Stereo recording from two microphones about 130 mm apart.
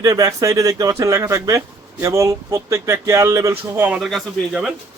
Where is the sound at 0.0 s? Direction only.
25° right (ahead or behind).